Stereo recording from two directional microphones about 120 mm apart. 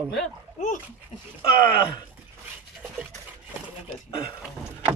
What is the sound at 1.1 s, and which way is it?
Speech, 90° left.